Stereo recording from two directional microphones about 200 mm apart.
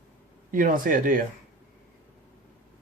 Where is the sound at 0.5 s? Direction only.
40° right (ahead or behind).